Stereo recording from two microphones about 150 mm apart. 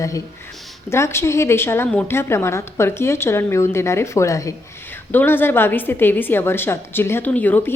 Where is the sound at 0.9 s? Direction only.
20° left (ahead or behind).